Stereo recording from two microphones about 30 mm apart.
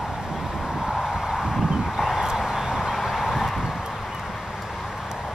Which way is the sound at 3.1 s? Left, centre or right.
Centre.